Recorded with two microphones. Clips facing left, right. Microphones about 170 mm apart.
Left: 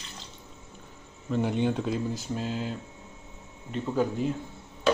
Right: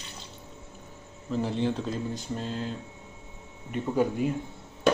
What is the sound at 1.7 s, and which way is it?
Mantra, 5° left (ahead or behind).